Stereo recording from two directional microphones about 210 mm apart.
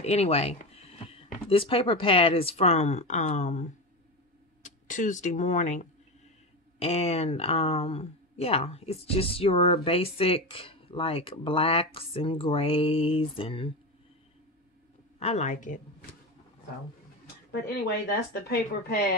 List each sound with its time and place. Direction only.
0.0 s speech: 30° left (ahead or behind)
4.6 s speech: 35° left (ahead or behind)
6.8 s speech: 30° left (ahead or behind)
15.1 s speech: 30° left (ahead or behind)
17.5 s speech: 50° left (ahead or behind)